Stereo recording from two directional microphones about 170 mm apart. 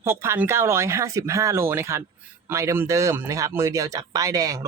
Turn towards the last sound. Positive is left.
turn(degrees=-20)  # may be behind; listen again after turning